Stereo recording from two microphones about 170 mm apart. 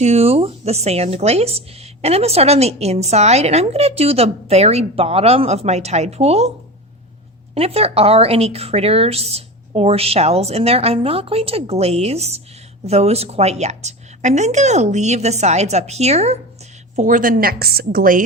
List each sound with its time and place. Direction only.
0.0 s a woman's voice: 40° right (ahead or behind)
7.5 s a woman's voice: 35° right (ahead or behind); by 18.2 s 55° right (ahead or behind)